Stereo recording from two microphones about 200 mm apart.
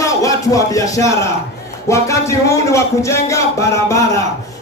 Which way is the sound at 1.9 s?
15° left (ahead or behind).